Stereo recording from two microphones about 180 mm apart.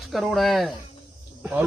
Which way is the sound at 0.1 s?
Centre (ahead or behind).